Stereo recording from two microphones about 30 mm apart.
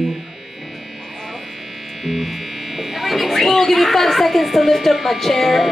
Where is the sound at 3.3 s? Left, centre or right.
Centre.